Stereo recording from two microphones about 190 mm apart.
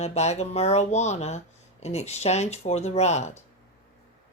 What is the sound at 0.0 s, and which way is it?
Speech, 35° left (ahead or behind).